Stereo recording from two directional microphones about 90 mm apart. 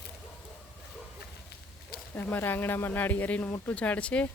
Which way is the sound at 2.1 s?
25° left (ahead or behind).